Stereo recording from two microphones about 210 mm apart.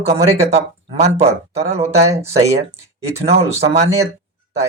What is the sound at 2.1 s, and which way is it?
Speech, 15° right (ahead or behind).